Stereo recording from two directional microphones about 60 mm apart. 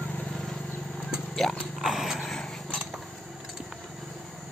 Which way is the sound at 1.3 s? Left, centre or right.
Centre.